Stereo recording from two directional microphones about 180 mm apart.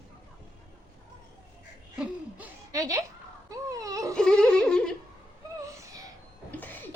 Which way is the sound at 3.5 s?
20° right (ahead or behind).